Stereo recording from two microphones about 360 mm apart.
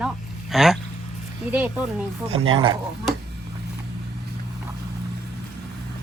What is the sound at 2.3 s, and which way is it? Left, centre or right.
Speech, right.